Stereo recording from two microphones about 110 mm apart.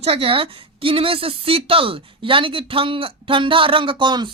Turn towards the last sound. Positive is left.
turn(degrees=-45)  # may be behind; listen again after turning